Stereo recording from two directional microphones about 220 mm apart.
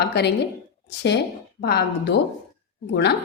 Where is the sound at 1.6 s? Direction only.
50° left (ahead or behind).